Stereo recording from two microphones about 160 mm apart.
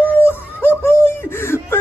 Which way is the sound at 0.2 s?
15° left (ahead or behind).